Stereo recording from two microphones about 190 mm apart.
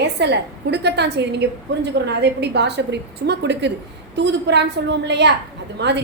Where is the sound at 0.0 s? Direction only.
60° right (ahead or behind).